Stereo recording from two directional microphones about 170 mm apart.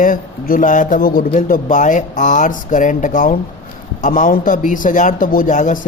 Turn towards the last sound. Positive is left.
turn(degrees=45)  # may be behind; listen again after turning